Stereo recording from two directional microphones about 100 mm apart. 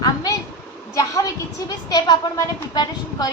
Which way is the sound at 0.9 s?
35° left (ahead or behind).